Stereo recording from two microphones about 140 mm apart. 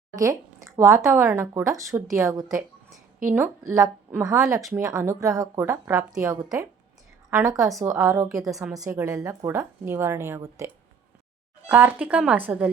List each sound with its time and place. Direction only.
0.2 s a woman's voice: 20° right (ahead or behind)
8.4 s a woman's voice: centre (ahead or behind)
8.7 s speech: 25° right (ahead or behind)
11.7 s speech: 10° right (ahead or behind)